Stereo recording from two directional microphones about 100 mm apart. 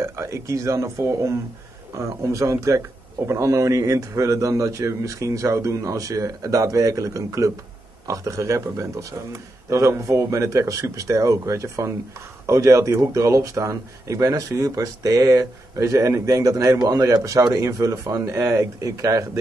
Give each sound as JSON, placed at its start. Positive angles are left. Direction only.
{"t": 0.0, "sound": "speech", "side_deg": -30}